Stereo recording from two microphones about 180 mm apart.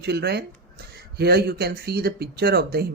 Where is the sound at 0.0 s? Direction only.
65° right (ahead or behind).